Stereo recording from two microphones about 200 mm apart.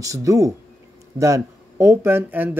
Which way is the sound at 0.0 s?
15° right (ahead or behind).